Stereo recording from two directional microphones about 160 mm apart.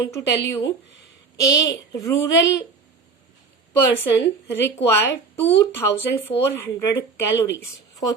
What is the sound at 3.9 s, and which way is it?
Speech, 15° left (ahead or behind).